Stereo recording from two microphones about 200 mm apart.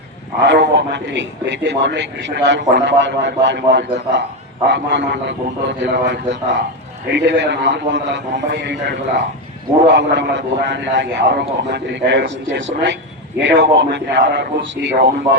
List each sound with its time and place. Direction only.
0.4 s a man's voice: 60° right (ahead or behind)